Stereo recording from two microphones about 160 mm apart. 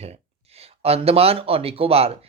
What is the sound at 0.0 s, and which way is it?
Speech, 40° right (ahead or behind).